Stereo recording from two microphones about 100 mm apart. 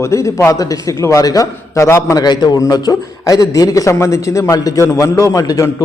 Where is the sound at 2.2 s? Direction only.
45° left (ahead or behind).